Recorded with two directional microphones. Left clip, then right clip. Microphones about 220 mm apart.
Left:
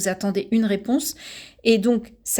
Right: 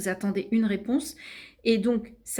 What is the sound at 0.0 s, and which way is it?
A woman's voice, 45° left (ahead or behind).